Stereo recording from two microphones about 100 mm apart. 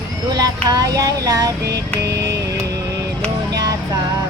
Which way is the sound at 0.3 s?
40° right (ahead or behind).